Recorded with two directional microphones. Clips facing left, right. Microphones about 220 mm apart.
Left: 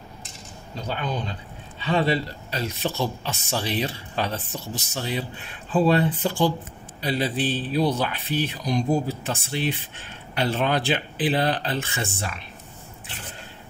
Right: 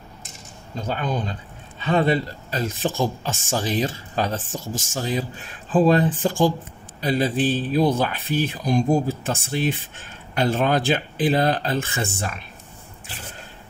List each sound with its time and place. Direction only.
0.7 s speech: 45° right (ahead or behind)